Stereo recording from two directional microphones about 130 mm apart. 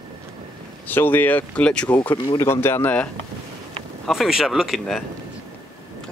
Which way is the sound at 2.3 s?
20° left (ahead or behind).